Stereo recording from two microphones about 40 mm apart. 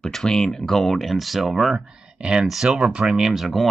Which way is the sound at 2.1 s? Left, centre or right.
Right.